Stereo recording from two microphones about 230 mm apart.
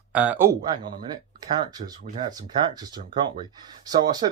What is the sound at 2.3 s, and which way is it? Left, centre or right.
Speech, centre.